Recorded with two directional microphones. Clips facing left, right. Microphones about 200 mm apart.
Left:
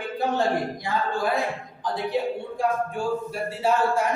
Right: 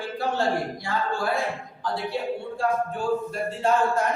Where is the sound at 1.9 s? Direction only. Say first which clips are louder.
Left 3 dB; 15° left (ahead or behind).